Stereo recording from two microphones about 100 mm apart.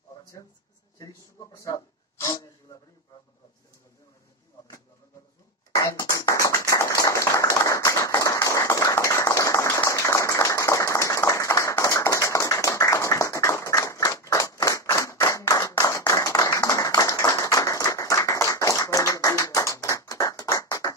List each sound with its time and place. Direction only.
0.9 s speech: 35° left (ahead or behind)
5.8 s a sound: 30° left (ahead or behind)
16.1 s clapping: 35° left (ahead or behind)